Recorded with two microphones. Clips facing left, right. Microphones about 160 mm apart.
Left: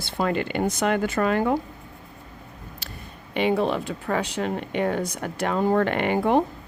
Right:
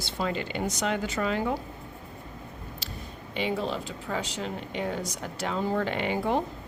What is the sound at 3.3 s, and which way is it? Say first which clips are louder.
Speech: left 7 dB; 60° left (ahead or behind).